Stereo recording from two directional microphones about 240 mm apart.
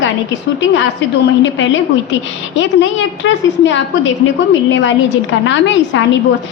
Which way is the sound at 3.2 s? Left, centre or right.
Left.